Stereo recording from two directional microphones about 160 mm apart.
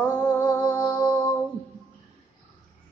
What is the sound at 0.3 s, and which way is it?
Music, 25° left (ahead or behind).